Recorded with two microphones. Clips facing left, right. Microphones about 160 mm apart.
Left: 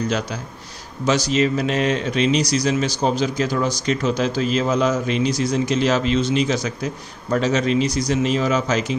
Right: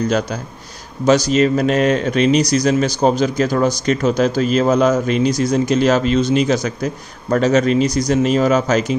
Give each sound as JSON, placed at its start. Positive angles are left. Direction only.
{"t": 1.0, "sound": "speech", "side_deg": -45}